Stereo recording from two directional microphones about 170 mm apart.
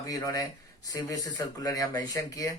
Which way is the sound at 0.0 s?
20° left (ahead or behind).